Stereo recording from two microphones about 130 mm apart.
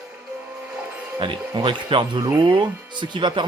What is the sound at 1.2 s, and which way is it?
Speech, 40° right (ahead or behind).